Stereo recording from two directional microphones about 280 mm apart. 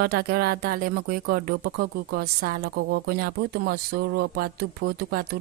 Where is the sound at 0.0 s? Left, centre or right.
Right.